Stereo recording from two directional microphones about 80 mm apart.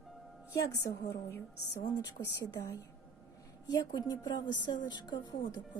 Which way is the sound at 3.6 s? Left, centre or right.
Left.